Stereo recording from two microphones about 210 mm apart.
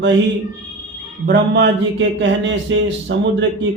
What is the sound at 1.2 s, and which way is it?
A man's voice, 55° right (ahead or behind).